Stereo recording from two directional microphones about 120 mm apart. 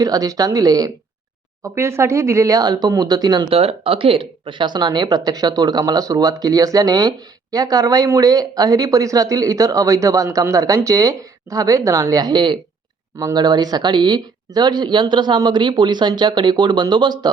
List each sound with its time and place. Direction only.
0.0 s speech: 30° right (ahead or behind)
3.5 s speech: 55° right (ahead or behind)
13.1 s speech: 25° right (ahead or behind)